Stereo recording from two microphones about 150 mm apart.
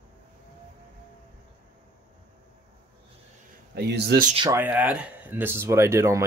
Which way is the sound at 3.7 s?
90° right.